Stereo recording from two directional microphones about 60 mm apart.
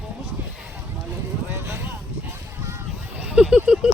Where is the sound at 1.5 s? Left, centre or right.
Right.